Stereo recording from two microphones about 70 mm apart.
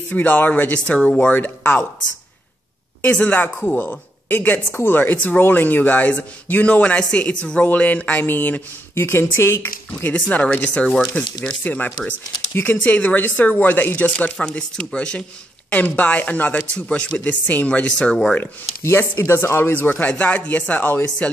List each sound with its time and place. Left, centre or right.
0.1 s speech: left
3.0 s speech: centre
14.3 s speech: centre
18.8 s speech: left